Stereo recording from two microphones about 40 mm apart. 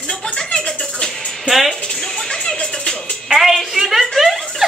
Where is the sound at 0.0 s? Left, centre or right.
Left.